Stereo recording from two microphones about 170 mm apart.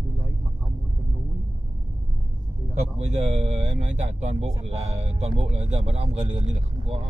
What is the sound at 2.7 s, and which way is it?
Speech, 40° right (ahead or behind).